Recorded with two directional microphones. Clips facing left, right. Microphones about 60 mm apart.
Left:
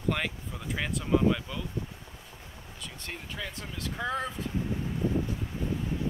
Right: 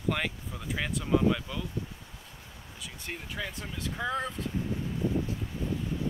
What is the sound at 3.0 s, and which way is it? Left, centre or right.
Speech, centre.